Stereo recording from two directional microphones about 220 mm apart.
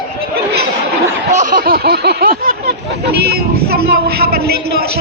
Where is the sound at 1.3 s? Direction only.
35° right (ahead or behind).